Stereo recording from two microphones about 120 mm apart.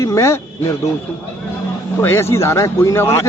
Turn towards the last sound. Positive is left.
turn(degrees=25)  # may be behind; listen again after turning